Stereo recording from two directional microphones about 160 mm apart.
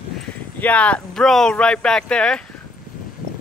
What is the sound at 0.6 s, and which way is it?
Speech, 10° left (ahead or behind).